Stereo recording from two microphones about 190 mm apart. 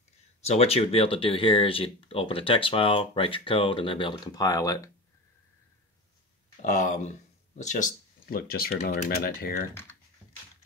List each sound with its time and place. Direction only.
0.4 s speech: 35° left (ahead or behind); by 4.9 s 15° left (ahead or behind)
6.6 s speech: 40° left (ahead or behind)